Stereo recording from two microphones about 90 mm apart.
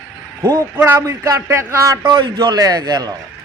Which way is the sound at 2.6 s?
50° right (ahead or behind).